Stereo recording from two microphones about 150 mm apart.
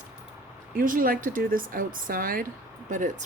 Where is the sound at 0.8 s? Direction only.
65° right (ahead or behind).